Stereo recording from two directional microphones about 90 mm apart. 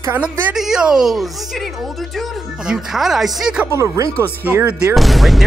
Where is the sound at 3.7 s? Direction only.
35° right (ahead or behind).